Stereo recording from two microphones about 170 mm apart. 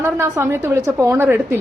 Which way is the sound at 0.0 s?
15° right (ahead or behind).